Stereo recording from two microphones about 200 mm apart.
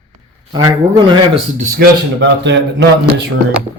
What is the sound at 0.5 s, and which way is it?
Speech, 20° right (ahead or behind).